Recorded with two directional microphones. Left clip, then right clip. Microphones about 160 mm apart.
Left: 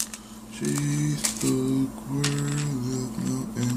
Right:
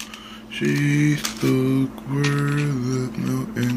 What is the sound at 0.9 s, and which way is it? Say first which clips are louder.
Speech: right 7 dB; 15° right (ahead or behind).